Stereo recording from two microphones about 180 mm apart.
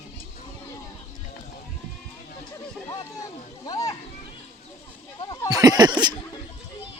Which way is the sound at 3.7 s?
20° left (ahead or behind).